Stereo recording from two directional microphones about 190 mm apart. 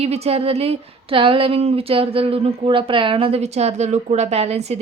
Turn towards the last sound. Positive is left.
turn(degrees=-35)  # may be behind; listen again after turning